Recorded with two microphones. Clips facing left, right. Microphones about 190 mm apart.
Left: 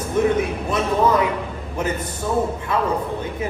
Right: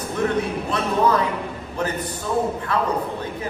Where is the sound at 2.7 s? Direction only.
20° left (ahead or behind).